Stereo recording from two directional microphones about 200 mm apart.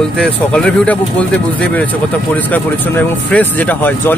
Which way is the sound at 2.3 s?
10° left (ahead or behind).